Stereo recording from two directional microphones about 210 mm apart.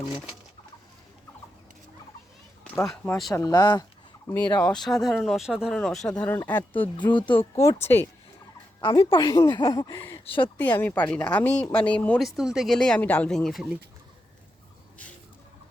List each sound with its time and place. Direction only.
0.0 s speech: 5° right (ahead or behind)
2.7 s speech: 10° left (ahead or behind)
4.5 s speech: 5° left (ahead or behind)
7.1 s speech: 20° left (ahead or behind)
8.8 s speech: 25° left (ahead or behind)
10.6 s speech: 10° left (ahead or behind)